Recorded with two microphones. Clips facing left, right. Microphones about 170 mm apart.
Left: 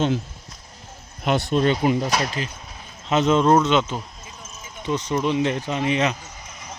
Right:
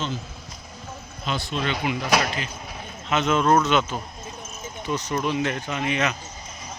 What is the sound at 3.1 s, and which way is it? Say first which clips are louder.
Speech: left 3 dB; 35° left (ahead or behind).